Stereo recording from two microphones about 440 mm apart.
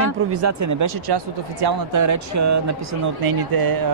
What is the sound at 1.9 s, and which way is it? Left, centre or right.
Speech, right.